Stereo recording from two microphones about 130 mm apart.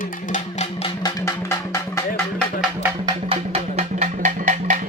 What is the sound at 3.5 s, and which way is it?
Music, 60° right (ahead or behind).